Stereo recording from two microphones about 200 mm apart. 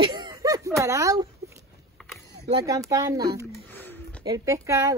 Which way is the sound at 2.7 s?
15° right (ahead or behind).